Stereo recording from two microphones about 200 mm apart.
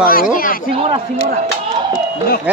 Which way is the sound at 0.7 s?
30° right (ahead or behind).